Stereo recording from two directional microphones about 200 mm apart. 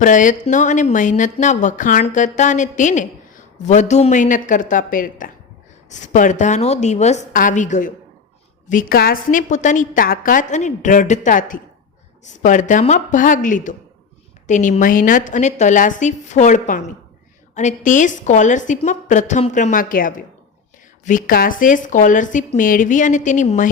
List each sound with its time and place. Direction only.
0.0 s speech: 40° left (ahead or behind)